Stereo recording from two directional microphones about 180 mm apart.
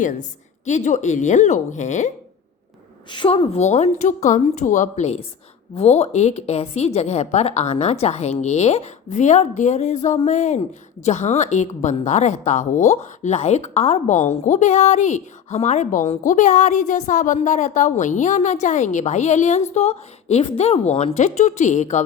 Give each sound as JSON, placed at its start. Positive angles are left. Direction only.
{"t": 0.0, "sound": "a woman's voice", "side_deg": 45}
{"t": 3.1, "sound": "a woman's voice", "side_deg": 25}